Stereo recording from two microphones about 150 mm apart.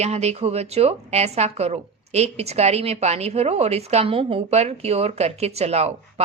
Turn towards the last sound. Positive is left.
turn(degrees=-45)  # may be behind; listen again after turning